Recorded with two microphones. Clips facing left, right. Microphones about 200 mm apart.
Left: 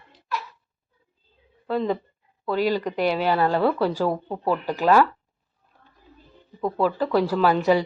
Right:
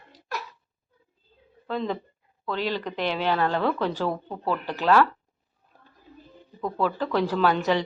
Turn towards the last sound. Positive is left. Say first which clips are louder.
# left 3 dB
turn(degrees=10)  # may be behind; listen again after turning